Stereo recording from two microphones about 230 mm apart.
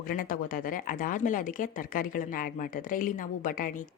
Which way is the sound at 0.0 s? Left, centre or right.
Left.